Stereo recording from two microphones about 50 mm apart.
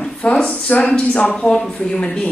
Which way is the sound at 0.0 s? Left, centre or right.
Centre.